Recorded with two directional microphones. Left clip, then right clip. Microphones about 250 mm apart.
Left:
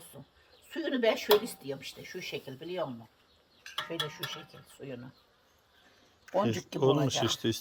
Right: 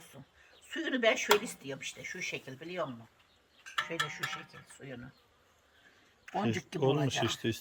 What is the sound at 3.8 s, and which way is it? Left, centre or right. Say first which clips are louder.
Cowbell: right 1 dB; centre.